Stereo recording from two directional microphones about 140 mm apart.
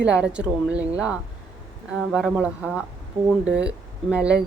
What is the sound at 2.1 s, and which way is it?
Speech, 5° right (ahead or behind).